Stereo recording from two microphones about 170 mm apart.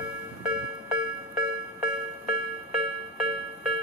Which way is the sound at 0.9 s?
25° right (ahead or behind).